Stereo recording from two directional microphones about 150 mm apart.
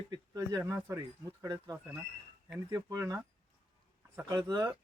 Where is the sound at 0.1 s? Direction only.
25° right (ahead or behind).